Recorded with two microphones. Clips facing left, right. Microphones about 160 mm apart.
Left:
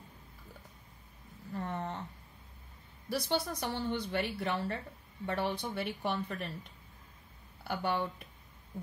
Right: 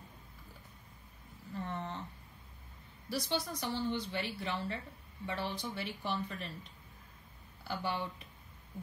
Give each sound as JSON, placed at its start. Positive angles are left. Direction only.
{"t": 1.6, "sound": "a sound", "side_deg": 50}
{"t": 3.1, "sound": "a woman's voice", "side_deg": 60}
{"t": 7.6, "sound": "a woman's voice", "side_deg": 55}